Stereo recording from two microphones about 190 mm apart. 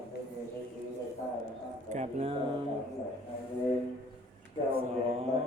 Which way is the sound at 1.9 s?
35° right (ahead or behind).